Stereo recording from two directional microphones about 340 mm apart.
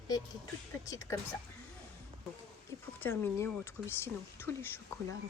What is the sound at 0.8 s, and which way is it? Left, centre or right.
Speech, centre.